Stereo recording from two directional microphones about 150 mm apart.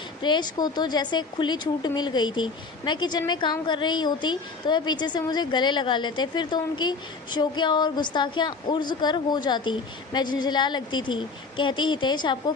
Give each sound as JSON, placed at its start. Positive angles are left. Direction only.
{"t": 0.2, "sound": "speech", "side_deg": 30}